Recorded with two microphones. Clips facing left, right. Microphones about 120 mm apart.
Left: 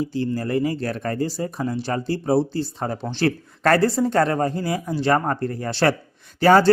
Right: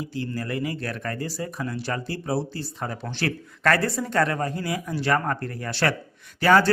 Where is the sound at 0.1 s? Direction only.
30° left (ahead or behind).